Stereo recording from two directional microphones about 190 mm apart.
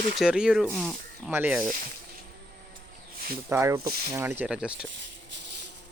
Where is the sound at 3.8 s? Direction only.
55° right (ahead or behind).